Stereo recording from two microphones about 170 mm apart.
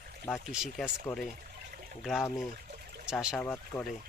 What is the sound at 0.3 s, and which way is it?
Speech, 5° right (ahead or behind).